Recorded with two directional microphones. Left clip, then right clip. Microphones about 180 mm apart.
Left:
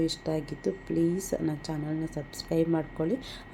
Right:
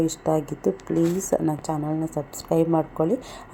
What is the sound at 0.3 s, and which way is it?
Speech, 15° right (ahead or behind).